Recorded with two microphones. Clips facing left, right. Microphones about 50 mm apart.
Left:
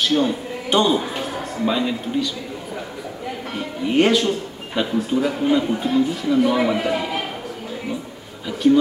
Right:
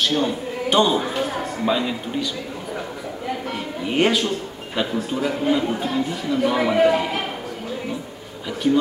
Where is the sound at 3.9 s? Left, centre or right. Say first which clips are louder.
Left 3 dB; centre.